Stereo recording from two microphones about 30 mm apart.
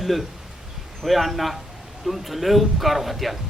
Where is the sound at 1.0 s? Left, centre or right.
Centre.